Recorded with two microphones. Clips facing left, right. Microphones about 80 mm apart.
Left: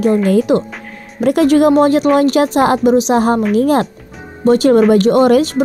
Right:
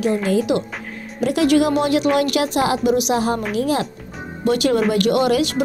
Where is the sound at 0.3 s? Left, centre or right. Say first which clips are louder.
Left 6 dB; left.